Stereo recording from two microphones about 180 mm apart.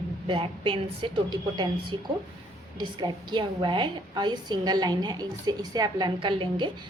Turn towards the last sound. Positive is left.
turn(degrees=-25)  # may be behind; listen again after turning